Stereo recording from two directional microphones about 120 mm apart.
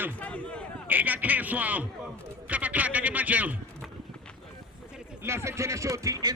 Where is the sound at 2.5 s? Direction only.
15° right (ahead or behind).